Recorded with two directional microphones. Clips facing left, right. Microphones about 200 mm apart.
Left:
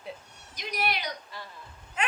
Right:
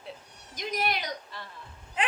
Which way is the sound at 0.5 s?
45° right (ahead or behind).